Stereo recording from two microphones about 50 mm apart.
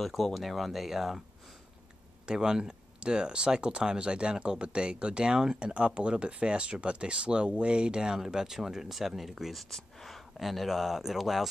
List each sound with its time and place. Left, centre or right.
0.0 s speech: centre
2.2 s speech: centre